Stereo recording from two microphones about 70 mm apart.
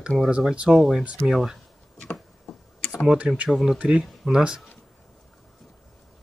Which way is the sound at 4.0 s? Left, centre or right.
Centre.